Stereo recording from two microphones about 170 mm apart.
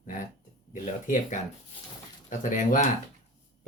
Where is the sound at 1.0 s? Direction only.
50° left (ahead or behind).